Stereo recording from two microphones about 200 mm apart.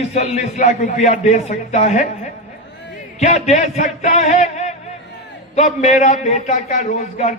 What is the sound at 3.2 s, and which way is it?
A man's voice, 35° left (ahead or behind).